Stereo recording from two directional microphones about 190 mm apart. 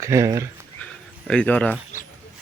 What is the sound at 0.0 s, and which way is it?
Speech, 15° right (ahead or behind).